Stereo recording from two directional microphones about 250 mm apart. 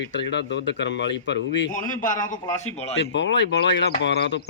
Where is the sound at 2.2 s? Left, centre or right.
Centre.